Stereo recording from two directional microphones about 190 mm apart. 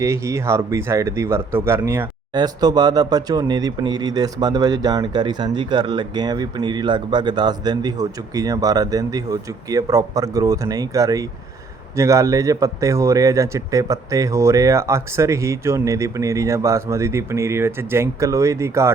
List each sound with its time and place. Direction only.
0.0 s a man's voice: 15° right (ahead or behind)